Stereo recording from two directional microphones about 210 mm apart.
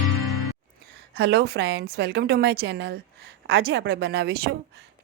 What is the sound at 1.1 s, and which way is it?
A woman's voice, 50° right (ahead or behind).